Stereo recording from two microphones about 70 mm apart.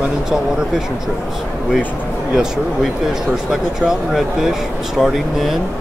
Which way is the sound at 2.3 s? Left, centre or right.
Centre.